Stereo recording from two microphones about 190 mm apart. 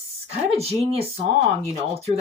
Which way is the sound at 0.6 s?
30° right (ahead or behind).